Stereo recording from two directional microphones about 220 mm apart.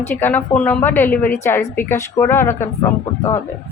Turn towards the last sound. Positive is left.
turn(degrees=15)  # may be behind; listen again after turning